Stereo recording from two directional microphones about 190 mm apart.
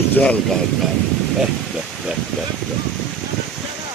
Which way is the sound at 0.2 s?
5° left (ahead or behind).